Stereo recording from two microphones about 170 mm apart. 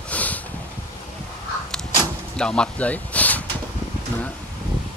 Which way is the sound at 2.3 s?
5° left (ahead or behind).